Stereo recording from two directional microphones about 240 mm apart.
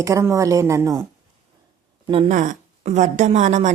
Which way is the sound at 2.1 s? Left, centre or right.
Right.